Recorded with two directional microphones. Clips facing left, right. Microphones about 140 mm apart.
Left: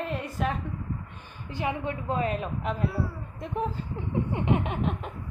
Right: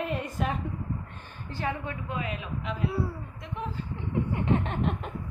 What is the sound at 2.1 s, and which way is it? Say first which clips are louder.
A man's voice: left 7 dB; 40° left (ahead or behind).